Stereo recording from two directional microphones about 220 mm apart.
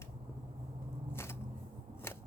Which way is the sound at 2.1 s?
10° left (ahead or behind).